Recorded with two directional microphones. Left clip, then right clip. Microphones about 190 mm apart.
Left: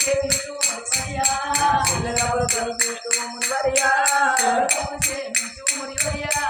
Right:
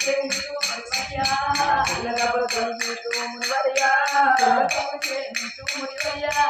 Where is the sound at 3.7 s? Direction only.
15° left (ahead or behind).